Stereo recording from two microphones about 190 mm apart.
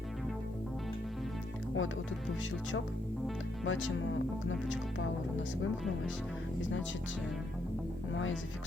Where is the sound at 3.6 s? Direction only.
90° left.